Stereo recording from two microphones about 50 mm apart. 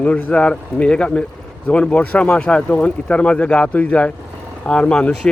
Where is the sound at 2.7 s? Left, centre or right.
Left.